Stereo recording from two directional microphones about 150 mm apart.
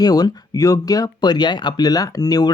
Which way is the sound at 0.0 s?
25° left (ahead or behind).